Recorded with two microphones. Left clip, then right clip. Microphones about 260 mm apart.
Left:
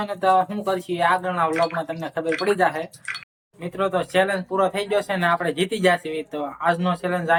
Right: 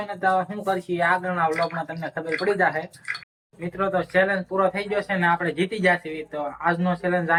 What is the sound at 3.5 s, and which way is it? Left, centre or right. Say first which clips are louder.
Speech: left 1 dB; centre.